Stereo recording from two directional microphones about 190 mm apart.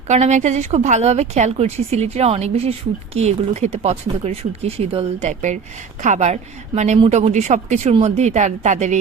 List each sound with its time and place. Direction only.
0.1 s a woman's voice: 35° right (ahead or behind)